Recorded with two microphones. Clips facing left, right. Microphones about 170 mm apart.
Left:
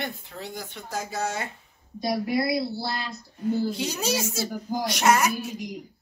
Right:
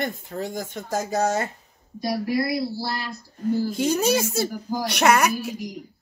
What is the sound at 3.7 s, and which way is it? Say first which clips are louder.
Speech: right 7 dB; 50° right (ahead or behind).